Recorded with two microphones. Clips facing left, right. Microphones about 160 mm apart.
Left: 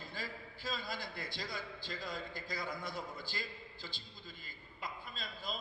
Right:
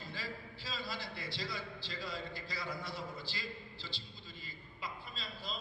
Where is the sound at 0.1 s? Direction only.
50° left (ahead or behind).